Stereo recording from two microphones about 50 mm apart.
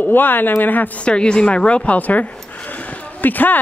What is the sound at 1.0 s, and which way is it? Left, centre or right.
A woman's voice, centre.